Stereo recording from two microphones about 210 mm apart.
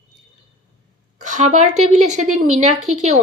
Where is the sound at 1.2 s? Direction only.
35° right (ahead or behind).